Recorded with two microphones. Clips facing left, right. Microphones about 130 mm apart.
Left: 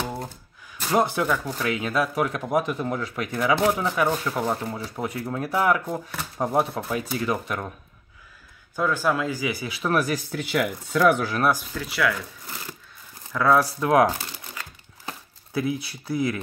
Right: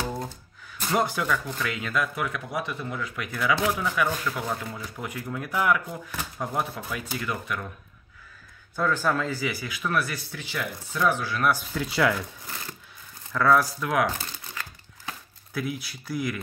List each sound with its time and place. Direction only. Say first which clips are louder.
0.9 s speech: left 3 dB; 20° left (ahead or behind)
2.1 s speech: left 7 dB; 40° left (ahead or behind)
3.3 s speech: left 4 dB; 30° left (ahead or behind)
8.7 s speech: left 2 dB; 10° left (ahead or behind)
9.8 s speech: left 6 dB; 40° left (ahead or behind); by 11.2 s 65° left (ahead or behind)
11.8 s speech: right 3 dB; 25° right (ahead or behind)
13.3 s speech: left 1 dB; 15° left (ahead or behind)
13.6 s speech: left 6 dB; 30° left (ahead or behind)